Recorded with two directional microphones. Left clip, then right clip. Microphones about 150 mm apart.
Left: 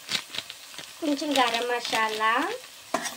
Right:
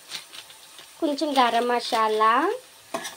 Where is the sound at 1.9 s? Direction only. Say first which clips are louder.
Right 5 dB; 45° right (ahead or behind).